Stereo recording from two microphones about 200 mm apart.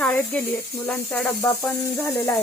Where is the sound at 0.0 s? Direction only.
5° left (ahead or behind).